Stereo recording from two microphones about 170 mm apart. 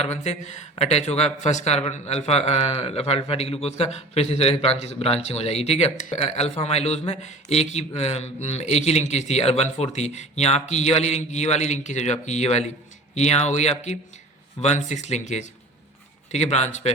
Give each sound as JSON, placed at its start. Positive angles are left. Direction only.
{"t": 0.0, "sound": "a man's voice", "side_deg": 40}